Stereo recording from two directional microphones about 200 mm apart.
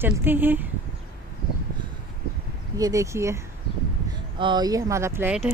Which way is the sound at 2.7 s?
15° right (ahead or behind).